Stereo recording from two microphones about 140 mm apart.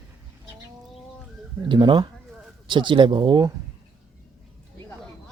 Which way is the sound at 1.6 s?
35° right (ahead or behind).